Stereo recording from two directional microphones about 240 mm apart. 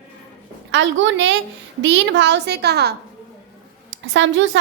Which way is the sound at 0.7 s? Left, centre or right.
Right.